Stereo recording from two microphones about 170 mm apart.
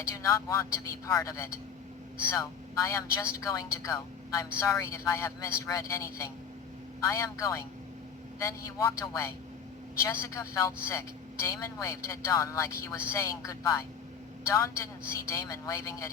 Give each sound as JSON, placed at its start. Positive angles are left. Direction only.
{"t": 0.2, "sound": "a woman's voice", "side_deg": 20}